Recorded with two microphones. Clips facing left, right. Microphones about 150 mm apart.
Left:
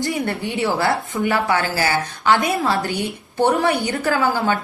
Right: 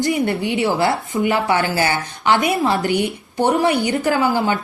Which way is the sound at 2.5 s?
20° right (ahead or behind).